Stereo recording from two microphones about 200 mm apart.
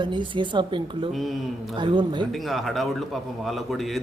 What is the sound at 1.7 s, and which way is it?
Speech, 25° right (ahead or behind).